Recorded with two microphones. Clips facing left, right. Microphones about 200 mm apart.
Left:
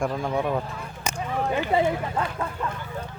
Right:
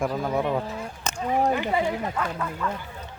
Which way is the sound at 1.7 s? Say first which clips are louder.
Left 2 dB; 25° left (ahead or behind).